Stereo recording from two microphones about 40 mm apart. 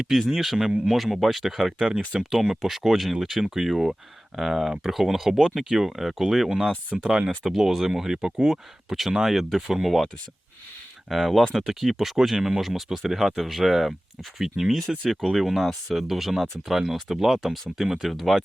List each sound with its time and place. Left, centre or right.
0.3 s speech: centre
1.8 s speech: centre
6.9 s speech: right
7.3 s speech: centre
11.1 s speech: centre
14.8 s speech: centre